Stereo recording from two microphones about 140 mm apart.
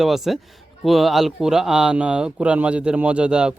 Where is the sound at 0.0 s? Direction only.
Centre (ahead or behind).